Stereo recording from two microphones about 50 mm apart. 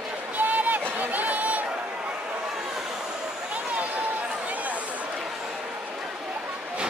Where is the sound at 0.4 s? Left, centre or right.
Right.